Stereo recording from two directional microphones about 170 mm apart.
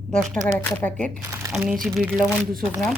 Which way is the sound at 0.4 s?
10° left (ahead or behind).